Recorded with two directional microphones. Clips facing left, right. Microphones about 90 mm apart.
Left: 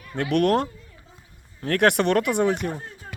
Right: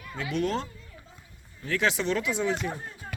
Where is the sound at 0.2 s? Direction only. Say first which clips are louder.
Left 8 dB; 70° left (ahead or behind).